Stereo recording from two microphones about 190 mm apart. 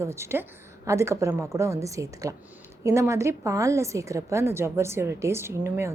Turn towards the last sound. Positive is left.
turn(degrees=-10)  # may be behind; listen again after turning